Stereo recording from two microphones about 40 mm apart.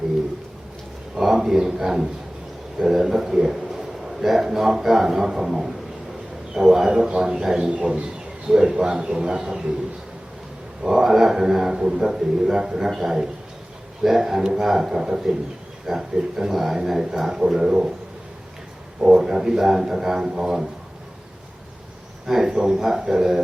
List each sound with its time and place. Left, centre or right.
1.1 s a man's voice: centre
10.8 s a man's voice: centre
18.9 s a man's voice: centre
22.3 s a man's voice: centre